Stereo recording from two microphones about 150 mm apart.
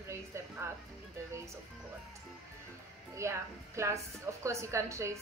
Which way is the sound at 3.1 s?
20° right (ahead or behind).